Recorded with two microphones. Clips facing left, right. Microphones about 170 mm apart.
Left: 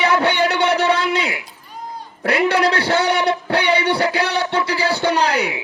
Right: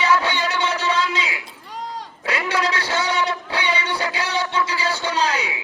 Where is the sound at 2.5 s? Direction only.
65° left (ahead or behind).